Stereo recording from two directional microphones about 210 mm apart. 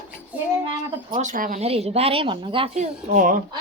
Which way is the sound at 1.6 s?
30° right (ahead or behind).